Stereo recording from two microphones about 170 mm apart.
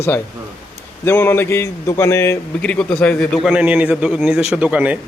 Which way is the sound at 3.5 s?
10° right (ahead or behind).